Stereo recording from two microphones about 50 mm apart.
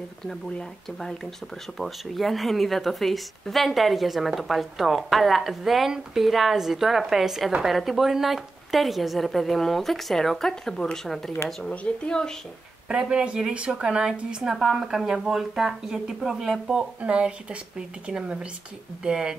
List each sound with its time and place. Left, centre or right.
0.6 s a woman's voice: centre
13.0 s speech: centre
17.0 s a woman's voice: right